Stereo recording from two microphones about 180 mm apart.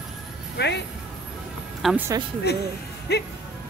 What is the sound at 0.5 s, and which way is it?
Speech, 70° left (ahead or behind).